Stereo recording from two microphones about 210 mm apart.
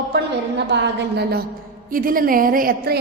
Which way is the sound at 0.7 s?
55° right (ahead or behind).